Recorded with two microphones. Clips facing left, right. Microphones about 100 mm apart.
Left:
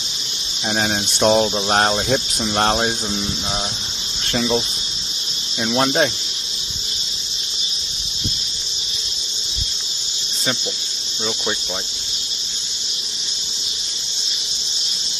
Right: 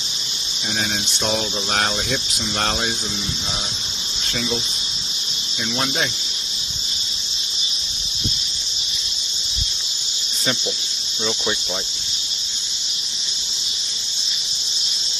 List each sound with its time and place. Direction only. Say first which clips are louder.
0.7 s speech: left 6 dB; 40° left (ahead or behind)
4.3 s speech: left 6 dB; 45° left (ahead or behind)
5.7 s speech: left 7 dB; 40° left (ahead or behind)